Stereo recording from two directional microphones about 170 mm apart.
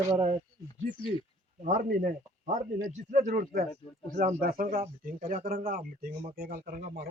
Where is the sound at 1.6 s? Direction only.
55° right (ahead or behind).